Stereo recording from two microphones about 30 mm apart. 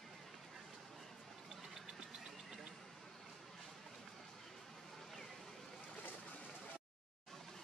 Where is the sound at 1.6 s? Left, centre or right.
Centre.